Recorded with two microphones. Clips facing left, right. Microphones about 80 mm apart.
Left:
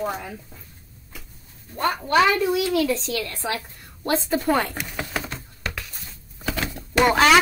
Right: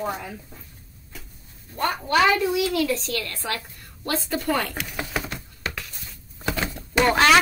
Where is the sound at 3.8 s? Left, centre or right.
Left.